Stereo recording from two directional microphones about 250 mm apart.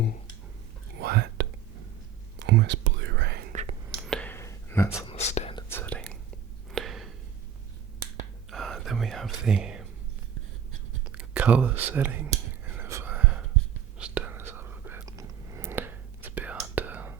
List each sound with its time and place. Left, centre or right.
0.9 s whispering: right
3.9 s whispering: centre
4.9 s whispering: left
5.7 s whispering: centre
6.7 s a sound: centre
8.4 s whispering: centre
11.0 s a sound: centre
11.9 s whispering: centre